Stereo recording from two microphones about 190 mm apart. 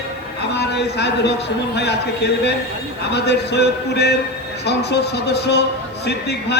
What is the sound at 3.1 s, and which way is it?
Speech, 60° left (ahead or behind).